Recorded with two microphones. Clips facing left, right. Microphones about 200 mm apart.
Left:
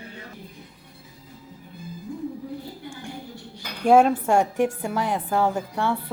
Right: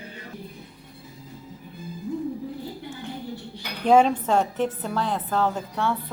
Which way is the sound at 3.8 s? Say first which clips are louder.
Left 1 dB; 10° left (ahead or behind).